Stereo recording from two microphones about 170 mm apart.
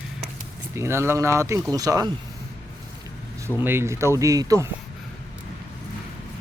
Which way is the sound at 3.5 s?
15° right (ahead or behind).